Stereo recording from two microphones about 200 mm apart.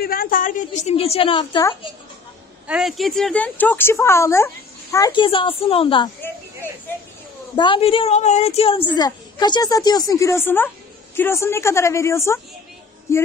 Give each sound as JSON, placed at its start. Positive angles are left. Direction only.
{"t": 0.0, "sound": "a woman's voice", "side_deg": 45}
{"t": 2.6, "sound": "a woman's voice", "side_deg": -5}
{"t": 7.5, "sound": "a woman's voice", "side_deg": 25}